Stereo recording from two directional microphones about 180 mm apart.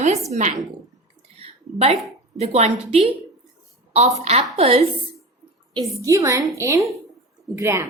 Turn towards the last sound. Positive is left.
turn(degrees=-15)  # may be behind; listen again after turning